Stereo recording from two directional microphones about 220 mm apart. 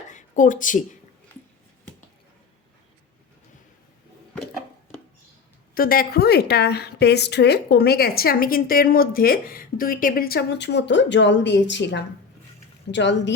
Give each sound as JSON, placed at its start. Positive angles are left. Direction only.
{"t": 0.1, "sound": "a woman's voice", "side_deg": 35}
{"t": 5.7, "sound": "a woman's voice", "side_deg": 40}